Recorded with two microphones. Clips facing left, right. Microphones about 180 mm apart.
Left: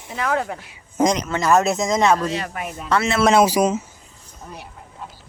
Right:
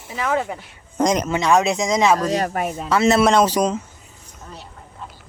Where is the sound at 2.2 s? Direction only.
40° right (ahead or behind).